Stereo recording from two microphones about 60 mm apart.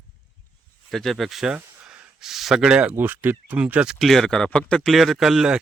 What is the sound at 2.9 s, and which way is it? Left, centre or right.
Speech, right.